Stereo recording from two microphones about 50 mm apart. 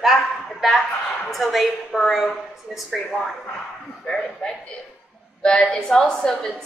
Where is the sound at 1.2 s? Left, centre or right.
Centre.